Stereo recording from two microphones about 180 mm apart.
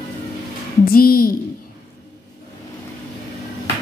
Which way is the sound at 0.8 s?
55° left (ahead or behind).